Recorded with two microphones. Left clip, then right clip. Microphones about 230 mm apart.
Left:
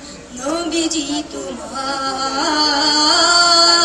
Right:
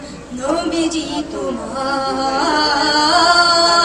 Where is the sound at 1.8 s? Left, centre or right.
Left.